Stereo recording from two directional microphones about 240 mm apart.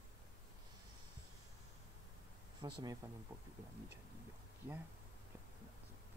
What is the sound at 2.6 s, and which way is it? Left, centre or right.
Speech, centre.